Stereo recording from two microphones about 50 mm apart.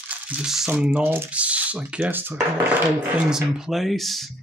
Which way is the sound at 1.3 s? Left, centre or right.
Right.